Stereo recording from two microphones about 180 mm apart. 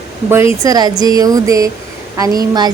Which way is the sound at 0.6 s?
20° right (ahead or behind).